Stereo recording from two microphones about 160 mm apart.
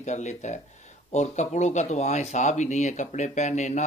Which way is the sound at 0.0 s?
45° left (ahead or behind).